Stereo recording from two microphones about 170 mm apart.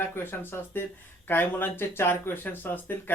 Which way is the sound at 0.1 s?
10° left (ahead or behind).